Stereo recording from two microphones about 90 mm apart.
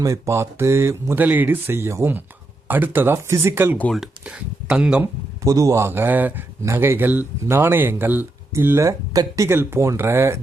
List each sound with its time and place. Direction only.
0.0 s speech: 35° right (ahead or behind)
1.2 s speech: 20° right (ahead or behind)
3.9 s speech: 5° right (ahead or behind)
5.4 s speech: 35° right (ahead or behind); by 6.4 s 20° right (ahead or behind)
6.6 s speech: 30° right (ahead or behind)